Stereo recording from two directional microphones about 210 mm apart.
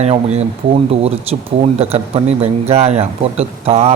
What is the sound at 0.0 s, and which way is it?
Speech, 30° right (ahead or behind).